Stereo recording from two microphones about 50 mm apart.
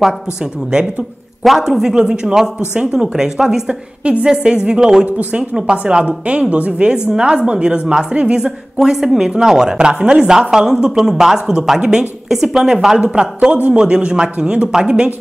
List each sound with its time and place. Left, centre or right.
1.4 s speech: centre
4.0 s speech: right